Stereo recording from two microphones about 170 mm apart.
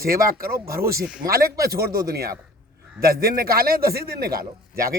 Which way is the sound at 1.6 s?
65° right (ahead or behind).